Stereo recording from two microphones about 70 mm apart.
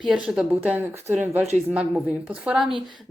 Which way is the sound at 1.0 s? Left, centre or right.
Right.